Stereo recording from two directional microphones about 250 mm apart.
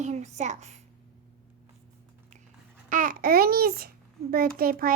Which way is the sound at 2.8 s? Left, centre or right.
Right.